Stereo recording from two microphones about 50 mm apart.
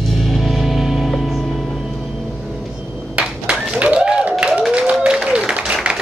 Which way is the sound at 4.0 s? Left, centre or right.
Centre.